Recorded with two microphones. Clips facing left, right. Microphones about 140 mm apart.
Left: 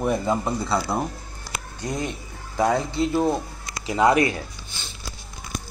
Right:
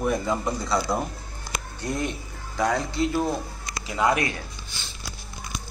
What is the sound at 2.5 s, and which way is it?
Speech, 25° left (ahead or behind).